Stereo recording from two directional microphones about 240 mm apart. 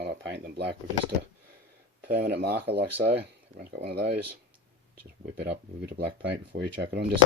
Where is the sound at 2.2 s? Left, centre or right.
Right.